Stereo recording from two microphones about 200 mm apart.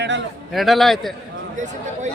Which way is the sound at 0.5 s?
Centre (ahead or behind).